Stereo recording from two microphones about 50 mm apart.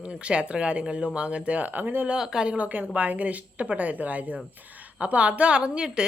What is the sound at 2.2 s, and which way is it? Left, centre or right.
Speech, centre.